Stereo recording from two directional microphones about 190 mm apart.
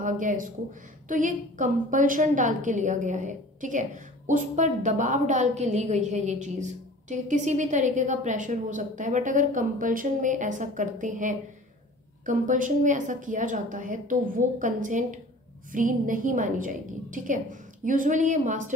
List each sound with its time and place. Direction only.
0.0 s a woman's voice: 45° right (ahead or behind)